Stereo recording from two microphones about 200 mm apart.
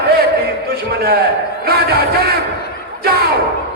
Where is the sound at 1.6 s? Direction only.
50° right (ahead or behind).